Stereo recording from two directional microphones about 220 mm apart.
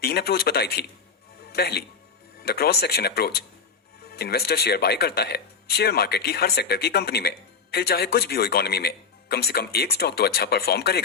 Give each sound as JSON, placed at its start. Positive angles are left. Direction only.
{"t": 0.0, "sound": "speech", "side_deg": 45}